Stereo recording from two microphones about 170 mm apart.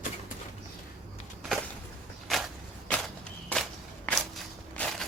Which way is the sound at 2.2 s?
Centre (ahead or behind).